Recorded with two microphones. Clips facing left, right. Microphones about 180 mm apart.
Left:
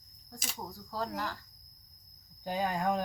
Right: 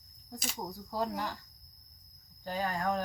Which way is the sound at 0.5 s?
15° right (ahead or behind).